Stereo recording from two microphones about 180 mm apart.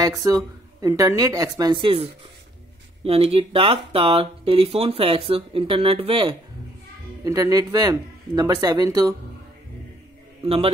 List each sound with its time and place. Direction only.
0.0 s speech: 20° right (ahead or behind)
7.2 s speech: 20° right (ahead or behind)
10.4 s speech: 35° right (ahead or behind)